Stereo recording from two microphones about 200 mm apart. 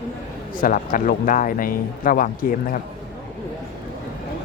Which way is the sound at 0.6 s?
45° left (ahead or behind).